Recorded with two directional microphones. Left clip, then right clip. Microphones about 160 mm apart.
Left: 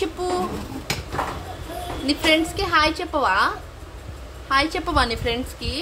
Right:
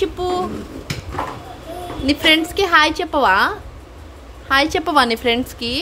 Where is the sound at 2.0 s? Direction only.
35° right (ahead or behind).